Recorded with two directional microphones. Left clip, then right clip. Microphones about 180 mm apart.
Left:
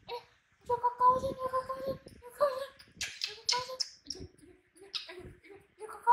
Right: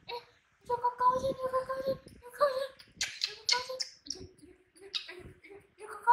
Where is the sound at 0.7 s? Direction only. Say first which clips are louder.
Left 2 dB; 35° left (ahead or behind).